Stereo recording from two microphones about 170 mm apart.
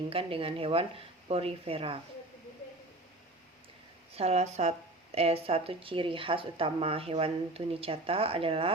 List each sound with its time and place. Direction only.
0.1 s speech: 35° right (ahead or behind)
4.1 s speech: 40° right (ahead or behind)